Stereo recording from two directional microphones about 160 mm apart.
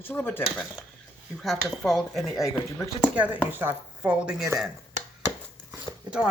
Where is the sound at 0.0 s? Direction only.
15° left (ahead or behind).